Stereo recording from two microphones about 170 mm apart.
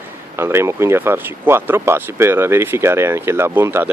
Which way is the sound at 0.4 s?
15° right (ahead or behind).